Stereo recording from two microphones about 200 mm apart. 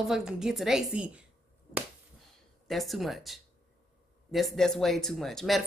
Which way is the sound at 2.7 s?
Centre (ahead or behind).